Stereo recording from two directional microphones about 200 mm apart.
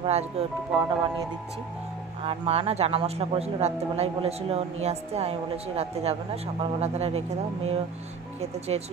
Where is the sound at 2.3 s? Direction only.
30° right (ahead or behind).